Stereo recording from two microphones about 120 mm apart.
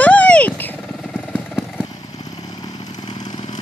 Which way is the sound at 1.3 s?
5° right (ahead or behind).